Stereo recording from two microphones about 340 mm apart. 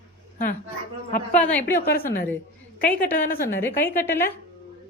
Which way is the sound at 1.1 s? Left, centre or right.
Left.